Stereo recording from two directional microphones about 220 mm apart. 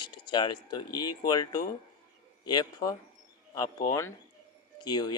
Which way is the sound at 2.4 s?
20° left (ahead or behind).